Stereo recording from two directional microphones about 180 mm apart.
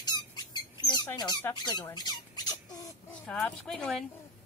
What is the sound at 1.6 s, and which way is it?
Speech, 25° left (ahead or behind).